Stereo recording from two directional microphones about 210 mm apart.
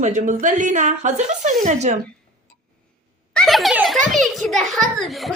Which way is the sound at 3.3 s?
Centre (ahead or behind).